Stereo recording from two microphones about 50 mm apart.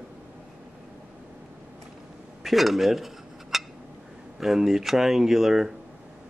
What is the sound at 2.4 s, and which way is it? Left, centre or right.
Cutlery, centre.